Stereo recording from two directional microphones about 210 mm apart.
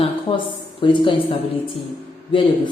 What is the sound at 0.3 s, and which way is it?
A woman's voice, 20° left (ahead or behind).